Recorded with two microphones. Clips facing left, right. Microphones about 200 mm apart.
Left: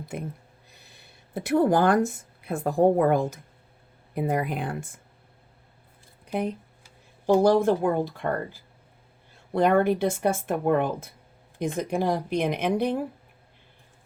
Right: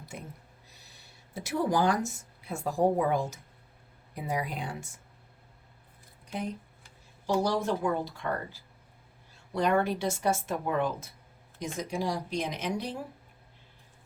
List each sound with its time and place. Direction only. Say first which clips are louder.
0.7 s speech: left 3 dB; 55° left (ahead or behind)
6.2 s a sound: left 7 dB; 60° left (ahead or behind)
7.4 s speech: left 8 dB; 55° left (ahead or behind)